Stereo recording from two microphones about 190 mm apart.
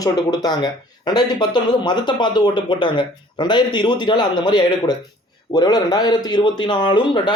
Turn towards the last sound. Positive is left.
turn(degrees=25)  # may be behind; listen again after turning